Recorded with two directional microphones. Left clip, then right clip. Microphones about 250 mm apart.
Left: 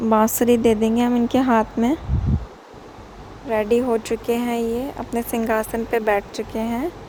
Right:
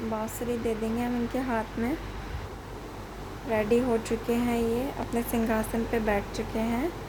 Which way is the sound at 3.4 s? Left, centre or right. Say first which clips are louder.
Left 6 dB; left.